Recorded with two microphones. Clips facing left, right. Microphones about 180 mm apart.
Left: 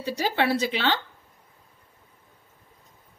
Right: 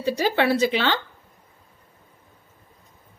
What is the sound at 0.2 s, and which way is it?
Speech, 90° right.